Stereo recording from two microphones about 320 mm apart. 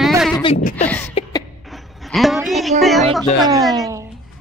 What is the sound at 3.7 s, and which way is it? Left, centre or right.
Speech, centre.